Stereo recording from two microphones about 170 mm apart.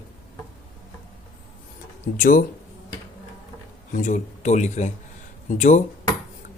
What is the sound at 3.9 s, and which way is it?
Speech, 50° left (ahead or behind).